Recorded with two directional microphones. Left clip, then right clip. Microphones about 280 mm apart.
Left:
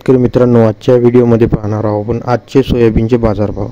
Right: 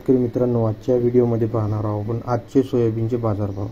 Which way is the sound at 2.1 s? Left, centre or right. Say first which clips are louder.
Left 10 dB; left.